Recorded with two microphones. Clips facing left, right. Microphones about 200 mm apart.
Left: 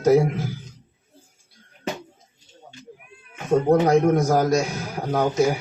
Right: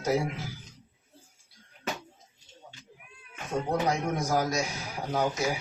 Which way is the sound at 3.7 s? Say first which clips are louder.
Left 11 dB; 55° left (ahead or behind).